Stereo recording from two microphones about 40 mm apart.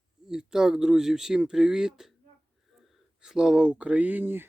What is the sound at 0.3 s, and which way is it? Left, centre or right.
Speech, centre.